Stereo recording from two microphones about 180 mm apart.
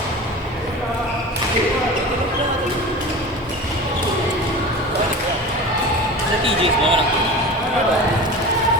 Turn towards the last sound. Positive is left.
turn(degrees=-30)  # may be behind; listen again after turning